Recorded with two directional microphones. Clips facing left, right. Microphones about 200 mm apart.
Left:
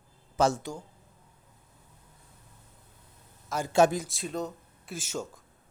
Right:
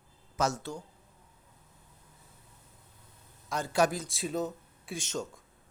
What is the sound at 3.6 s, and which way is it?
Speech, 25° left (ahead or behind).